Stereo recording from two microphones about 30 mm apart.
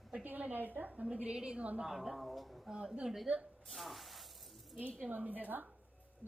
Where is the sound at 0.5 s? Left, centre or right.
Right.